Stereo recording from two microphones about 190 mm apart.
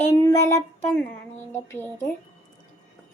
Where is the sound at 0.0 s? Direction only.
15° left (ahead or behind).